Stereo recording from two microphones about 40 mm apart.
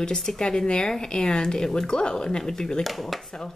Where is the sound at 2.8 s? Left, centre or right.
Centre.